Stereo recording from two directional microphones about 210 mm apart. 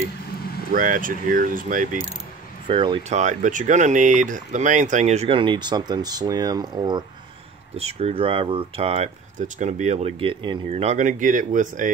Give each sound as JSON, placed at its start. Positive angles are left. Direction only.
{"t": 0.7, "sound": "speech", "side_deg": -40}
{"t": 2.7, "sound": "speech", "side_deg": -25}